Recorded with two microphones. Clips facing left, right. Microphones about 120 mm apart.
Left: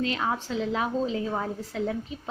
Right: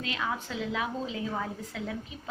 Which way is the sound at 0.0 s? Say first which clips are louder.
Left 5 dB; 35° left (ahead or behind).